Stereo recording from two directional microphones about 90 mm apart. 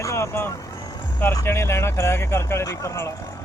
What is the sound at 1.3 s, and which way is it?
Speech, 30° left (ahead or behind).